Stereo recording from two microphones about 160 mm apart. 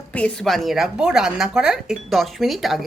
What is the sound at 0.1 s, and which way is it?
A woman's voice, 5° left (ahead or behind).